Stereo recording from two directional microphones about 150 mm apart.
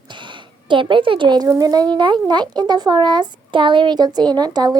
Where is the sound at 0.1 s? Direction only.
30° right (ahead or behind).